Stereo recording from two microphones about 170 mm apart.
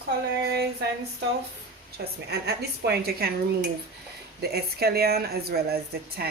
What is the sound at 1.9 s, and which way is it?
A woman's voice, 70° right (ahead or behind).